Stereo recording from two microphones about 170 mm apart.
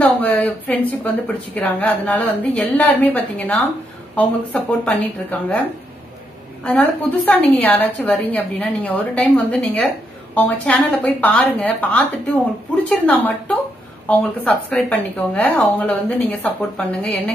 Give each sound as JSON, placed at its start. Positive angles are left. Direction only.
{"t": 0.0, "sound": "a woman's voice", "side_deg": 10}
{"t": 6.6, "sound": "a woman's voice", "side_deg": 10}
{"t": 14.7, "sound": "a woman's voice", "side_deg": 10}